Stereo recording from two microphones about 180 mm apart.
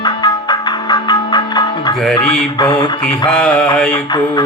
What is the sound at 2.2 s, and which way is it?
Mantra, 5° left (ahead or behind).